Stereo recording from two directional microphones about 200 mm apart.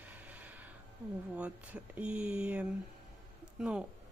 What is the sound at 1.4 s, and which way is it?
A woman's voice, 5° right (ahead or behind).